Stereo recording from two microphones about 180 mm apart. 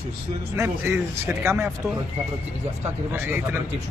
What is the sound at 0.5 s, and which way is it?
A man's voice, 15° right (ahead or behind).